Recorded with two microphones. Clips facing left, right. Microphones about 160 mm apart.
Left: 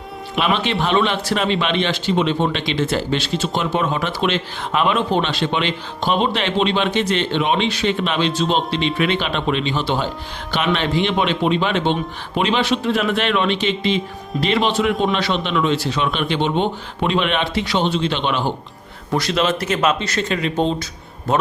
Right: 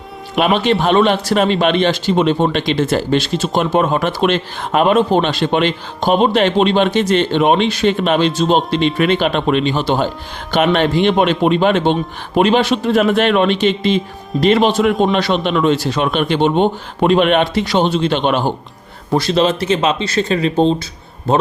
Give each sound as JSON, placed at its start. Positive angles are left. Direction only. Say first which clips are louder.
{"t": 0.3, "sound": "speech", "louder": "right 6 dB", "side_deg": -45}
{"t": 19.1, "sound": "speech", "louder": "right 5 dB", "side_deg": -30}